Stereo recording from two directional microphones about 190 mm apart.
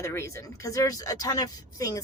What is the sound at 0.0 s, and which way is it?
Speech, 15° left (ahead or behind).